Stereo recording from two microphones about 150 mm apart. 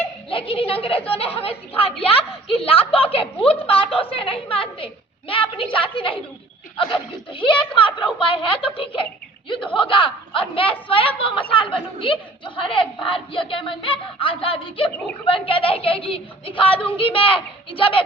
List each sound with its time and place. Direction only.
0.3 s a man's voice: 35° left (ahead or behind)